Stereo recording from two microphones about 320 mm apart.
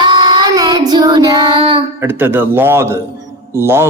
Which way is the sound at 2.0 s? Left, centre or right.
Centre.